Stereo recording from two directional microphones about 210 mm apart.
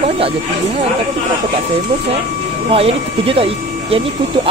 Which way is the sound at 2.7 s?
25° right (ahead or behind).